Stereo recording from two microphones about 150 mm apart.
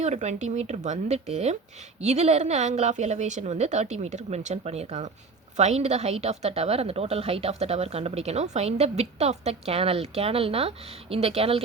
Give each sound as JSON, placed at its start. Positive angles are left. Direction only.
{"t": 0.0, "sound": "a woman's voice", "side_deg": -50}